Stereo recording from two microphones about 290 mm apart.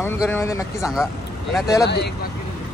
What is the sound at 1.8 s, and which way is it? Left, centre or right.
Speech, left.